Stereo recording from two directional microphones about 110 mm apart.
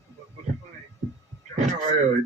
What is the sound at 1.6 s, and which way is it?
Speech, 90° right.